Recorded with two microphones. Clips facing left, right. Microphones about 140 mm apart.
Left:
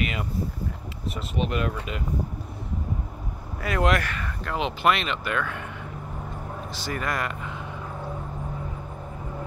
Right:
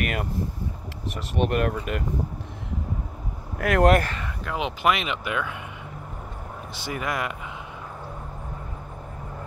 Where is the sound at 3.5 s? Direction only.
65° right (ahead or behind).